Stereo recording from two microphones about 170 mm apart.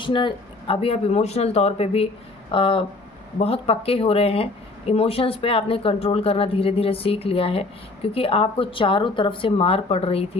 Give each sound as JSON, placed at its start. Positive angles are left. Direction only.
{"t": 0.0, "sound": "speech", "side_deg": 30}